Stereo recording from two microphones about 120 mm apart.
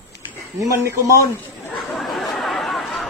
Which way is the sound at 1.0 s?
25° left (ahead or behind).